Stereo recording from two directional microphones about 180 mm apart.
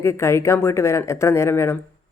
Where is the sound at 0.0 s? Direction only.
15° left (ahead or behind).